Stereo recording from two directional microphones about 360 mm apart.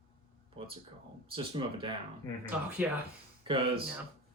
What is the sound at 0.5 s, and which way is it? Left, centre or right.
Speech, centre.